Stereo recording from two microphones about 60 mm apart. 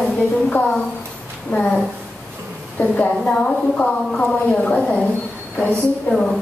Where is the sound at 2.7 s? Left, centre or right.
Left.